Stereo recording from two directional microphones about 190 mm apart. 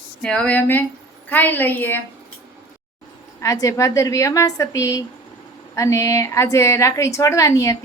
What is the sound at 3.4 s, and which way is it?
A woman's voice, 15° left (ahead or behind).